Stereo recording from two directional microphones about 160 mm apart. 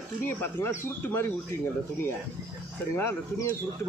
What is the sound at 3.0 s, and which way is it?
Speech, 15° left (ahead or behind).